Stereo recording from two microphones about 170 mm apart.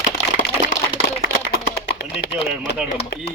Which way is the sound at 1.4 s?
90° left.